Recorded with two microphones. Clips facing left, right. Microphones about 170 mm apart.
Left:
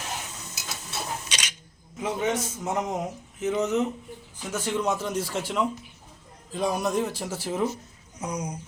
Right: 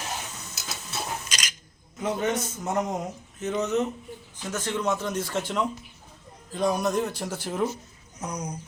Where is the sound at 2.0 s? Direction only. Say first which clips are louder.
Even; 5° left (ahead or behind).